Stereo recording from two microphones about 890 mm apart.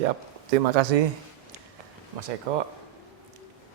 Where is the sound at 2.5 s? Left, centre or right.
Right.